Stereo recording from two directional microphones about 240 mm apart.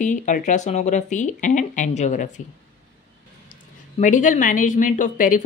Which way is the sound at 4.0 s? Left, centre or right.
Left.